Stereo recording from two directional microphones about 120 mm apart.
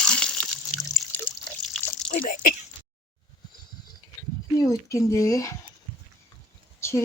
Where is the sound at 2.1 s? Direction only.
75° left (ahead or behind).